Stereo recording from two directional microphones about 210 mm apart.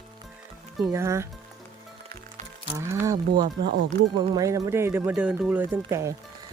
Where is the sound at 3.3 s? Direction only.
50° right (ahead or behind).